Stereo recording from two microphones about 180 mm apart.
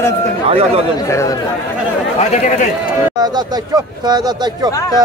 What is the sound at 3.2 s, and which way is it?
A man's voice, 20° right (ahead or behind).